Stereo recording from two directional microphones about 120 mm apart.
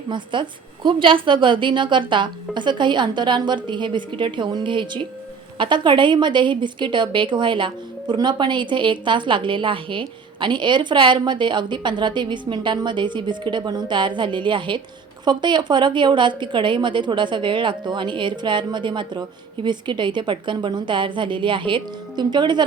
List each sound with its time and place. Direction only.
0.1 s a woman's voice: 40° right (ahead or behind)